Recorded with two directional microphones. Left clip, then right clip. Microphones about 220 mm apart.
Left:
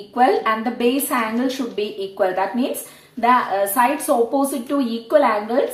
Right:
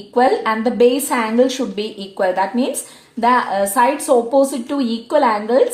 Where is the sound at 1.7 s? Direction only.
50° right (ahead or behind).